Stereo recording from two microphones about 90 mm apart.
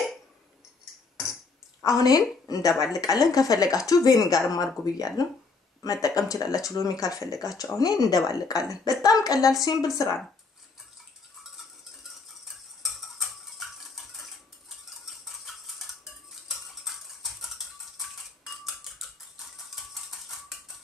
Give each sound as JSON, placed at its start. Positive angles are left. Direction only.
{"t": 1.8, "sound": "a woman's voice", "side_deg": 45}
{"t": 12.8, "sound": "cutlery", "side_deg": 0}
{"t": 17.9, "sound": "mechanisms", "side_deg": 0}